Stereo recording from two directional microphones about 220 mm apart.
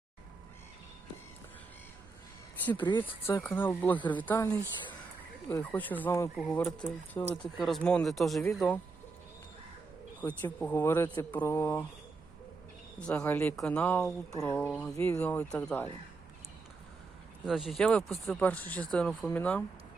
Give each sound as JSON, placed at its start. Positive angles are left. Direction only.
{"t": 2.9, "sound": "speech", "side_deg": 20}
{"t": 10.2, "sound": "speech", "side_deg": 5}
{"t": 13.0, "sound": "speech", "side_deg": 5}
{"t": 17.4, "sound": "speech", "side_deg": 0}